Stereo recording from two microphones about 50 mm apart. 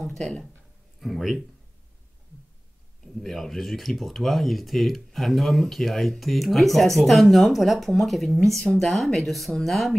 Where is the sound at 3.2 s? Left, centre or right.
Centre.